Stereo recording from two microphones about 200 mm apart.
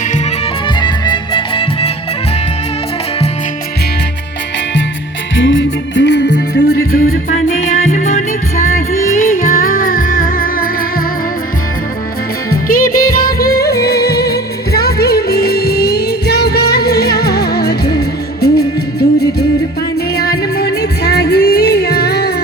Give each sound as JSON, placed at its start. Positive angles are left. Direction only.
{"t": 0.8, "sound": "music", "side_deg": 25}
{"t": 5.4, "sound": "music", "side_deg": 65}
{"t": 12.5, "sound": "music", "side_deg": 45}